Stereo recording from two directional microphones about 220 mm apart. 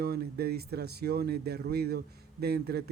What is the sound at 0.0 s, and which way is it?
A woman's voice, 45° right (ahead or behind).